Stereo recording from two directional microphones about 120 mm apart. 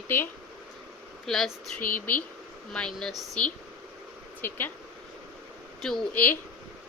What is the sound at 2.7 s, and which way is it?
Speech, 5° left (ahead or behind).